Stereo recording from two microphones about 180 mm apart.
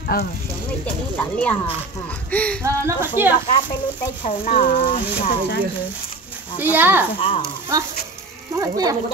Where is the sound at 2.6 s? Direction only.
15° right (ahead or behind).